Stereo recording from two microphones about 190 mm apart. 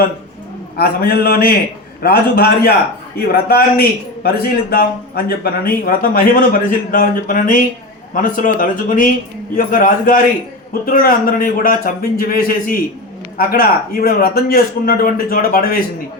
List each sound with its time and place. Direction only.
0.8 s a man's voice: 55° left (ahead or behind)